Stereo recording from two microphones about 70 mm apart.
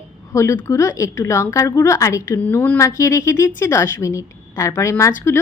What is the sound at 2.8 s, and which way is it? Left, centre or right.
A woman's voice, left.